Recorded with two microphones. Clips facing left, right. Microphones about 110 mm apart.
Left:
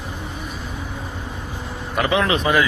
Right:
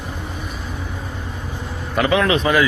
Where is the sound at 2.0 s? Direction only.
25° left (ahead or behind).